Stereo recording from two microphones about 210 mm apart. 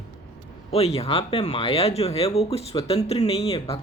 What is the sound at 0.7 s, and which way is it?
Speech, 30° left (ahead or behind).